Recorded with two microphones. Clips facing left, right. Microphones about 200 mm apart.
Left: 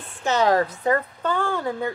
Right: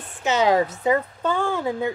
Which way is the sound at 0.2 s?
5° right (ahead or behind).